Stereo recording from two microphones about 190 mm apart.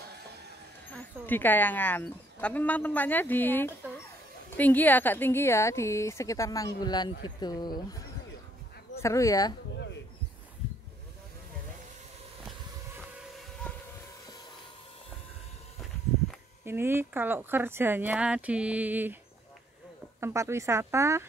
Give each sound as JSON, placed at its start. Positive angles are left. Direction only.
{"t": 0.9, "sound": "a woman's voice", "side_deg": 10}
{"t": 9.0, "sound": "a woman's voice", "side_deg": 15}
{"t": 13.7, "sound": "train", "side_deg": 10}
{"t": 16.6, "sound": "speech", "side_deg": -10}
{"t": 20.2, "sound": "speech", "side_deg": -15}